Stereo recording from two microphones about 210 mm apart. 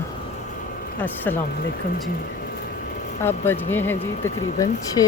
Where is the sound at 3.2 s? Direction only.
10° left (ahead or behind).